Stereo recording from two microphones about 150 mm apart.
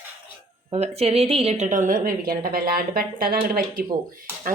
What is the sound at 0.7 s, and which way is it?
A woman's voice, 45° right (ahead or behind).